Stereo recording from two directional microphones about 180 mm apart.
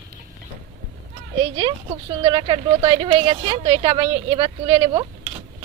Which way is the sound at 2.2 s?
25° right (ahead or behind).